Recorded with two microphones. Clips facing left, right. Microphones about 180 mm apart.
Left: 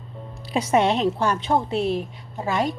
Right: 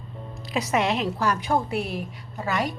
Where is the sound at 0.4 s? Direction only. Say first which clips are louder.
Left 4 dB; 30° left (ahead or behind).